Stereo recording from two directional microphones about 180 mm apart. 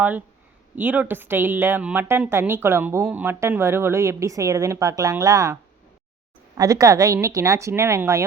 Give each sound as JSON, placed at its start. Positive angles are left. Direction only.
{"t": 0.0, "sound": "a woman's voice", "side_deg": -10}
{"t": 6.6, "sound": "a woman's voice", "side_deg": -20}